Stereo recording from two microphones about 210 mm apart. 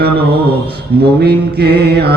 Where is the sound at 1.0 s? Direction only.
50° right (ahead or behind).